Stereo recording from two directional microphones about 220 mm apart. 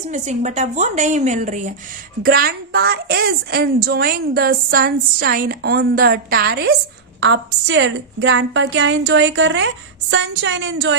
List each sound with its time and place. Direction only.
0.1 s a woman's voice: 30° right (ahead or behind); by 10.9 s 55° right (ahead or behind)